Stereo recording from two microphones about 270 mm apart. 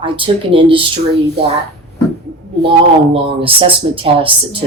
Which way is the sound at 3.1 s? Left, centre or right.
Centre.